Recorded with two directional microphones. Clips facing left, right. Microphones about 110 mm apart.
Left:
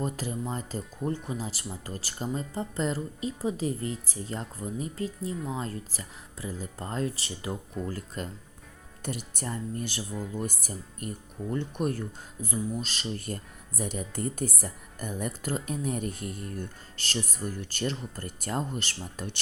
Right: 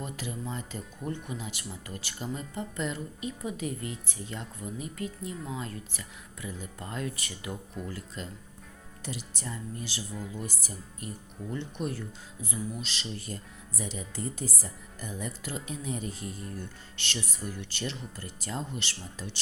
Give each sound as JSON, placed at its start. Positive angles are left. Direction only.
{"t": 0.0, "sound": "speech", "side_deg": 40}
{"t": 7.9, "sound": "speech", "side_deg": 45}
{"t": 17.0, "sound": "speech", "side_deg": 45}